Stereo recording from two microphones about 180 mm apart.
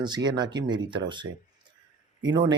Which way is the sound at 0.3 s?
25° right (ahead or behind).